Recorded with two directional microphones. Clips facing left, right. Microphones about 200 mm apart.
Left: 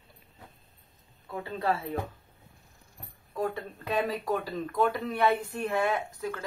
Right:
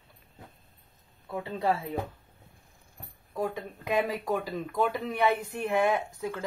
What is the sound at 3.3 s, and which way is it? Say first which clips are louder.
Speech: even; 10° right (ahead or behind).